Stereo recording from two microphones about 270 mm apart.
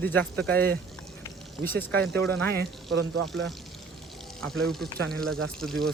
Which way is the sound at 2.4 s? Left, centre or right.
Right.